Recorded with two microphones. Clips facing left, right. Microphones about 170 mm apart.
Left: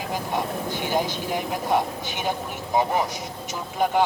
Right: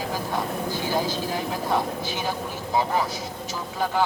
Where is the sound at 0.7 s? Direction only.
20° left (ahead or behind).